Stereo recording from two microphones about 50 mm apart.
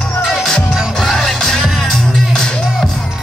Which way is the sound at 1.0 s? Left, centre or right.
Centre.